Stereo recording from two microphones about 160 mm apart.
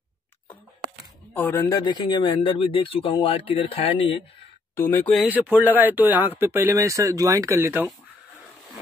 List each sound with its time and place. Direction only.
1.3 s speech: 10° left (ahead or behind); by 4.2 s 35° left (ahead or behind)
4.7 s speech: 15° left (ahead or behind)
5.1 s speech: 5° right (ahead or behind)